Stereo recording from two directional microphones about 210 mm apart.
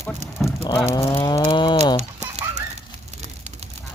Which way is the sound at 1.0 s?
20° left (ahead or behind).